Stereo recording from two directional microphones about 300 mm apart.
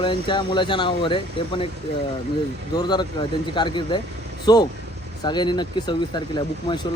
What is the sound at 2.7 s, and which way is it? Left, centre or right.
Speech, centre.